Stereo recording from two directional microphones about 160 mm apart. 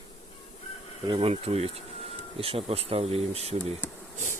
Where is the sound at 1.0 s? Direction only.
35° right (ahead or behind).